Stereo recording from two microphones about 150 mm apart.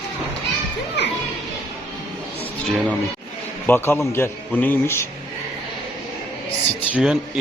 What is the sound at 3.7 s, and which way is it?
A man's voice, 15° left (ahead or behind).